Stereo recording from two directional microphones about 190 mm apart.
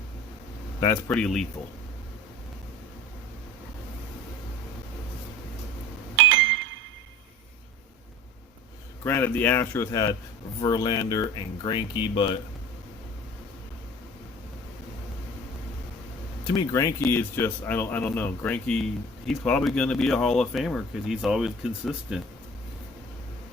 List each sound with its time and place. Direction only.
0.8 s speech: 15° left (ahead or behind)
6.1 s a sound: 80° right
9.0 s speech: 10° left (ahead or behind)
16.6 s speech: 15° left (ahead or behind); by 22.2 s 5° right (ahead or behind)